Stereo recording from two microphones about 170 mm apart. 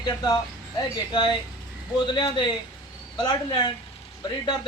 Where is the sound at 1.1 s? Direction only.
25° left (ahead or behind).